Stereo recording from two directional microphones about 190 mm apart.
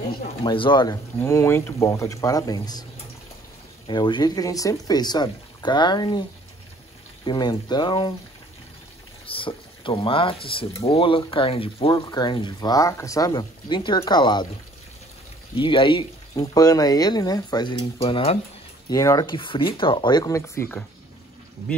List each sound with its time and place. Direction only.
0.4 s speech: 25° left (ahead or behind)
3.8 s speech: 25° left (ahead or behind)
7.2 s speech: 25° left (ahead or behind)
9.2 s speech: 30° left (ahead or behind)
15.5 s speech: 25° left (ahead or behind)
18.9 s speech: 20° left (ahead or behind)